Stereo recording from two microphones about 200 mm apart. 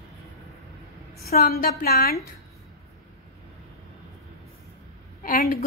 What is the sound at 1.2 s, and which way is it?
Speech, 50° left (ahead or behind).